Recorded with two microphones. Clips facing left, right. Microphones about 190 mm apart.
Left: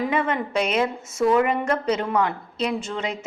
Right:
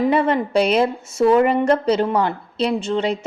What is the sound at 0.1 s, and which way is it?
A woman's voice, 35° right (ahead or behind).